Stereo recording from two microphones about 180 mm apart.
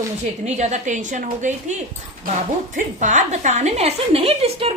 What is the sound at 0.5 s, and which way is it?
A woman's voice, 40° right (ahead or behind).